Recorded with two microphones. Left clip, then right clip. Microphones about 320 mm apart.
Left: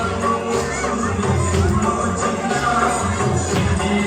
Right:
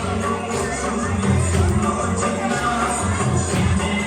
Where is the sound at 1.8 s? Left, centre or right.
Left.